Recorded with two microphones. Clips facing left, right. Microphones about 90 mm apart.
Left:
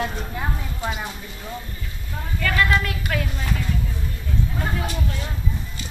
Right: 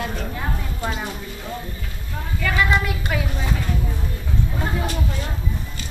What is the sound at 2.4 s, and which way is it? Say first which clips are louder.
A woman's voice: even; 5° right (ahead or behind).